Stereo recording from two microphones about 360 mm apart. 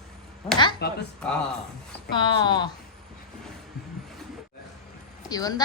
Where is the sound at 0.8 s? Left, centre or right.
Left.